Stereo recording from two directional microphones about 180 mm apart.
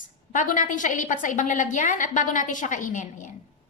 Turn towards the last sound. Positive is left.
turn(degrees=45)  # may be behind; listen again after turning